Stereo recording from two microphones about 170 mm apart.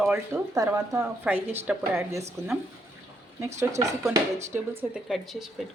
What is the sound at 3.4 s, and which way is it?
Speech, 15° right (ahead or behind).